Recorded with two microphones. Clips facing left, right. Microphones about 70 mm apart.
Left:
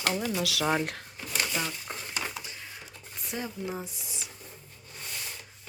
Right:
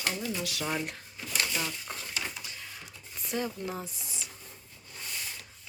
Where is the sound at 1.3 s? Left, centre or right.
Left.